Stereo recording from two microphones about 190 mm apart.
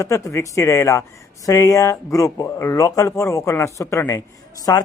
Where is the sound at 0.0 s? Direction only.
15° left (ahead or behind).